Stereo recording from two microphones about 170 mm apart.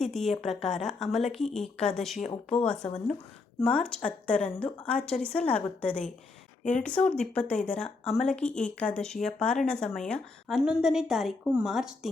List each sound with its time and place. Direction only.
0.0 s a woman's voice: centre (ahead or behind)
6.6 s speech: 45° left (ahead or behind)
6.8 s a woman's voice: 5° left (ahead or behind)